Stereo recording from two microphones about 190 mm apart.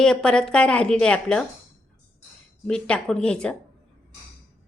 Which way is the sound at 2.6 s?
5° left (ahead or behind).